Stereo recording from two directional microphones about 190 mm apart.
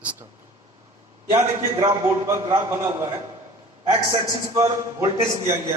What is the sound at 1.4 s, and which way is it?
A man's voice, 20° right (ahead or behind).